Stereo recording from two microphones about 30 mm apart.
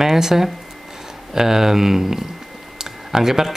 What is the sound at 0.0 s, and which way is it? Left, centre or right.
Speech, centre.